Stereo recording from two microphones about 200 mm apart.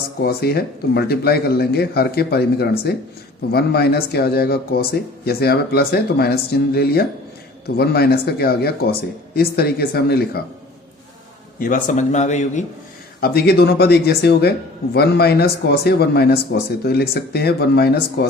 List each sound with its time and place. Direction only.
0.2 s speech: 50° left (ahead or behind)
11.6 s speech: 40° left (ahead or behind)
13.1 s speech: 50° left (ahead or behind)